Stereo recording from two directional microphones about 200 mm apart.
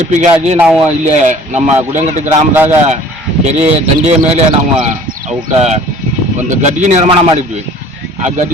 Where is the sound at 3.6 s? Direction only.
30° right (ahead or behind).